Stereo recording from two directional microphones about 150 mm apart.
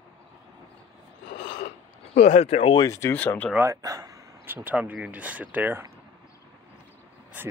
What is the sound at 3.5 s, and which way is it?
Speech, 20° right (ahead or behind).